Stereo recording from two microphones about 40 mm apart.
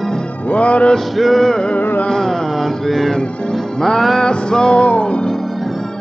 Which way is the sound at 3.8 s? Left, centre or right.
Centre.